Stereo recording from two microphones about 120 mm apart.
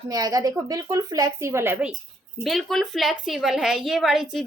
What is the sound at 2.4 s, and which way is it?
A woman's voice, centre (ahead or behind).